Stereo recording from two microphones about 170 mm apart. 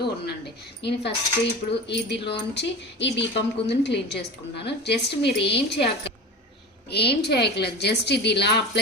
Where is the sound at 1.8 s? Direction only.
85° left.